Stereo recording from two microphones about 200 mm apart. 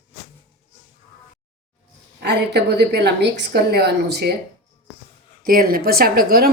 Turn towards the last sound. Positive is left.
turn(degrees=-45)  # may be behind; listen again after turning